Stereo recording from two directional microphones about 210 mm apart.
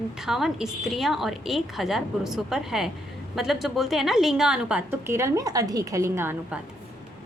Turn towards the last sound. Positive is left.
turn(degrees=-10)  # may be behind; listen again after turning